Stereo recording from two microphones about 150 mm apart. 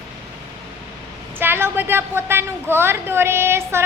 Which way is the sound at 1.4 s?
15° right (ahead or behind).